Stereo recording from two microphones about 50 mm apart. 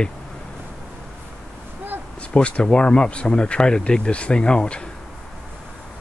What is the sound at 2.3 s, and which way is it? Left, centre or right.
Speech, left.